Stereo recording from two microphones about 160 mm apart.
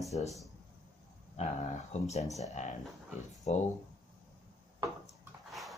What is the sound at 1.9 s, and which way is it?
Speech, 45° left (ahead or behind).